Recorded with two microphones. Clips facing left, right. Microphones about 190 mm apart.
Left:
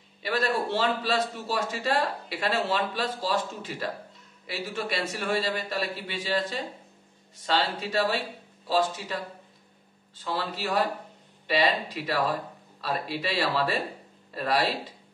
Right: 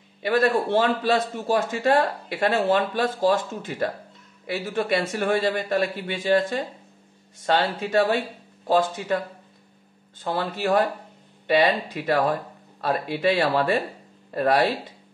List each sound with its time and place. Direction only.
0.2 s a man's voice: 50° right (ahead or behind)